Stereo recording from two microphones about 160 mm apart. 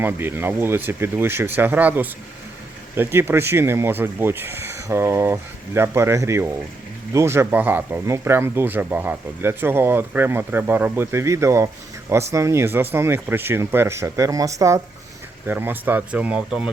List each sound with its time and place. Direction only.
0.0 s speech: 15° right (ahead or behind)